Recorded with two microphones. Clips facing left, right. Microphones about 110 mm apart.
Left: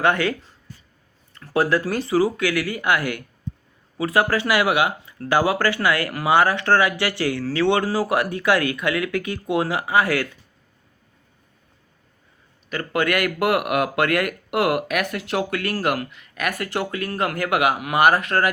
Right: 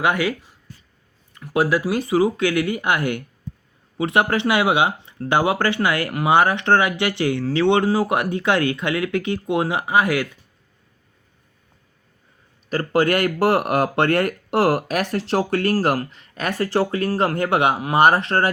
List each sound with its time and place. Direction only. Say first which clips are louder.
0.0 s speech: even; 10° right (ahead or behind)
12.7 s speech: right 4 dB; 35° right (ahead or behind)